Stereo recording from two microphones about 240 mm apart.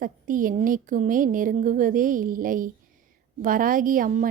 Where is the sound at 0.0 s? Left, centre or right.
Right.